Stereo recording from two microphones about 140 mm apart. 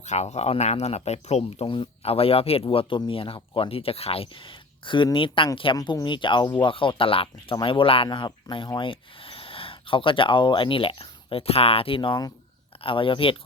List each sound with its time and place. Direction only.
0.0 s speech: 55° left (ahead or behind); by 13.3 s 40° left (ahead or behind)